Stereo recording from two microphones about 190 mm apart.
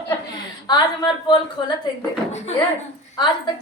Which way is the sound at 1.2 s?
25° left (ahead or behind).